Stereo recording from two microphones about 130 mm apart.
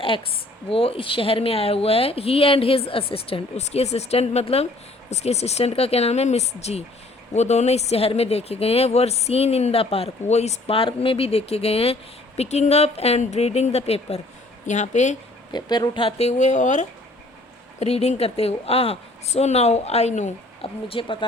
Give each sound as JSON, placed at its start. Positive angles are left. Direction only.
{"t": 0.7, "sound": "speech", "side_deg": 45}
{"t": 14.7, "sound": "speech", "side_deg": 65}
{"t": 15.5, "sound": "speech", "side_deg": 35}
{"t": 16.0, "sound": "speech", "side_deg": 55}
{"t": 17.7, "sound": "speech", "side_deg": 55}
{"t": 20.6, "sound": "speech", "side_deg": 45}